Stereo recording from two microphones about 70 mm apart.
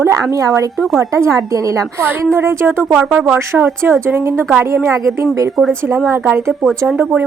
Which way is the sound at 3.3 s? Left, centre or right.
Right.